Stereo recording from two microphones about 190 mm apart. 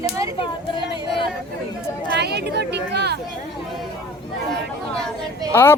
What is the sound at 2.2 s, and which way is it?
Speech, 60° right (ahead or behind).